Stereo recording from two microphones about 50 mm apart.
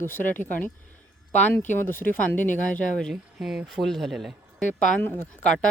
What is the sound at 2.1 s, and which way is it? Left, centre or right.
Speech, left.